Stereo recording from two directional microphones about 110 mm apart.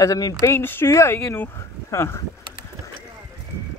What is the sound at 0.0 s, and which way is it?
Speech, 35° left (ahead or behind).